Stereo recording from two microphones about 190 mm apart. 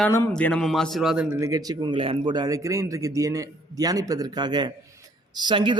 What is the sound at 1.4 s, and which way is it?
A man's voice, 20° right (ahead or behind).